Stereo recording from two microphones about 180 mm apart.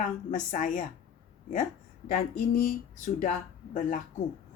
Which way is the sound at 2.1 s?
50° left (ahead or behind).